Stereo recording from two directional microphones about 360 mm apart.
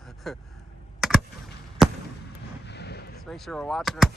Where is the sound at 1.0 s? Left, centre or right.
Centre.